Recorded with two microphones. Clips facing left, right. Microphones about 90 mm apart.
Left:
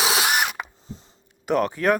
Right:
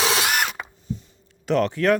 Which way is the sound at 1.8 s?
10° left (ahead or behind).